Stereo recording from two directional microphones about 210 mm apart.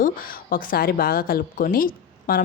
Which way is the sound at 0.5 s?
45° left (ahead or behind).